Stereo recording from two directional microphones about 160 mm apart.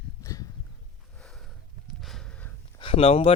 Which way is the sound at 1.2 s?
Centre (ahead or behind).